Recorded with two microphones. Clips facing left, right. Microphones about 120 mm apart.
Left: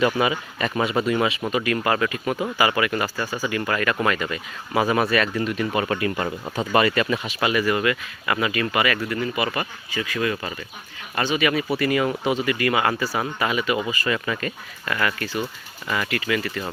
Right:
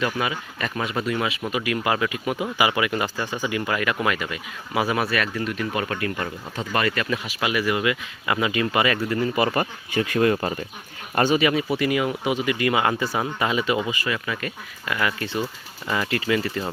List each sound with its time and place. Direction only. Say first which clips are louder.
0.0 s speech: left 5 dB; centre (ahead or behind); by 9.6 s 35° right (ahead or behind)
9.9 s speech: right 5 dB; 50° right (ahead or behind)
11.3 s speech: right 1 dB; 25° right (ahead or behind)
11.8 s speech: left 1 dB; 10° right (ahead or behind)
14.1 s speech: left 3 dB; 5° right (ahead or behind)
15.2 s speech: even; 25° right (ahead or behind)